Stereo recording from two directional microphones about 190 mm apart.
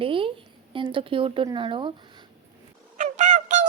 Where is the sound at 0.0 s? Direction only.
30° right (ahead or behind).